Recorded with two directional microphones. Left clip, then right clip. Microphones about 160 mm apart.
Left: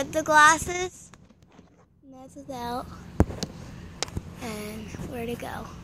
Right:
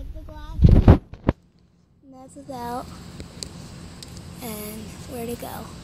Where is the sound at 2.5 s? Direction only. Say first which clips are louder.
Right 2 dB; 20° left (ahead or behind).